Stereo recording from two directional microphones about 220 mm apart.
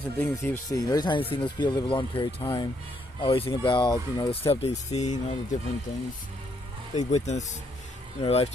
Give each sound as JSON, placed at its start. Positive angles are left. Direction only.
{"t": 0.2, "sound": "speech", "side_deg": 10}
{"t": 6.9, "sound": "speech", "side_deg": 30}